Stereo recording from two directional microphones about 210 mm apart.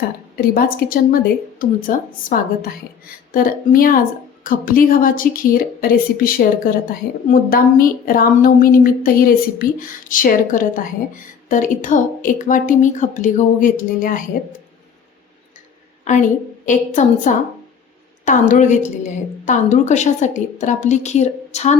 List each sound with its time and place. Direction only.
0.5 s a woman's voice: 45° left (ahead or behind)
16.1 s a woman's voice: 35° left (ahead or behind)